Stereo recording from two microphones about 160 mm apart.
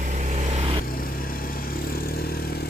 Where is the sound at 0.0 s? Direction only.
45° right (ahead or behind).